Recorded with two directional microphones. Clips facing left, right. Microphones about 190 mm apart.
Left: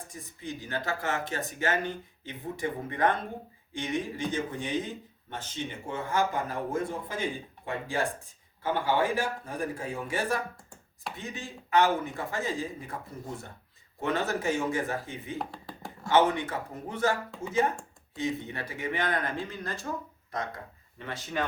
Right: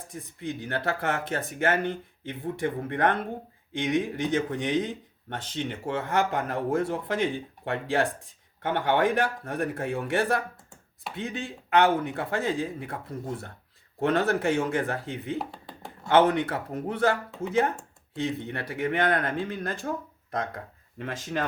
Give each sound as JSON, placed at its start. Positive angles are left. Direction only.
{"t": 0.1, "sound": "speech", "side_deg": -60}
{"t": 3.8, "sound": "a man's voice", "side_deg": -70}
{"t": 15.4, "sound": "a sound", "side_deg": 0}
{"t": 16.0, "sound": "speech", "side_deg": -60}